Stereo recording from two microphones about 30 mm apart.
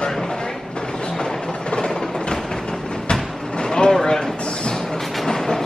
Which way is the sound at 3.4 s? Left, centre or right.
Left.